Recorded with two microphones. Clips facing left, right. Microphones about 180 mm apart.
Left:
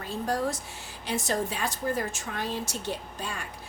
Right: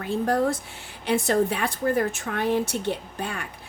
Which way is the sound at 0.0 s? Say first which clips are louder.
Right 6 dB; 60° right (ahead or behind).